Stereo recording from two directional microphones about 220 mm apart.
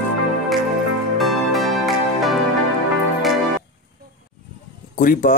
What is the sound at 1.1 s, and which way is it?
Music, centre (ahead or behind).